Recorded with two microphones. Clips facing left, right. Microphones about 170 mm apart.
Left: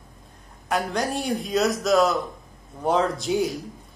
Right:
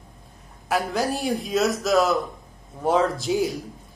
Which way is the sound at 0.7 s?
5° right (ahead or behind).